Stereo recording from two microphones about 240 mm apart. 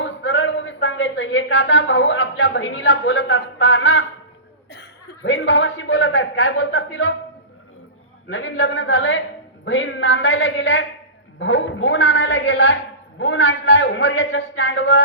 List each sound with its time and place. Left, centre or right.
0.0 s a man's voice: left
8.3 s a man's voice: left